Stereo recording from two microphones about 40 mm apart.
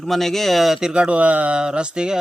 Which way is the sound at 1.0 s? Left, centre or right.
Right.